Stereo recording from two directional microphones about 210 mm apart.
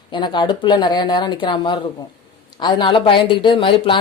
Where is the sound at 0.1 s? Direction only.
20° left (ahead or behind).